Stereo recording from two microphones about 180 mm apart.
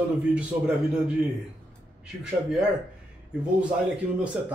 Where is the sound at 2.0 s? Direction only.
5° right (ahead or behind).